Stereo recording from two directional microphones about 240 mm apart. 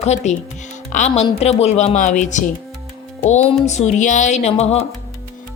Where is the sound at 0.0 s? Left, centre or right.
Left.